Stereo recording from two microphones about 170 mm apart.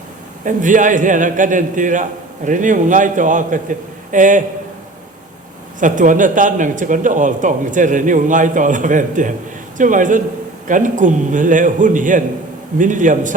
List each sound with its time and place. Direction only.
0.4 s a man's voice: 50° right (ahead or behind)
5.8 s a man's voice: 50° right (ahead or behind)